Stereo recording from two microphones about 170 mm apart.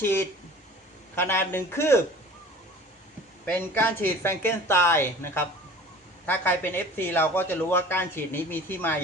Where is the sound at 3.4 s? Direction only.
10° left (ahead or behind).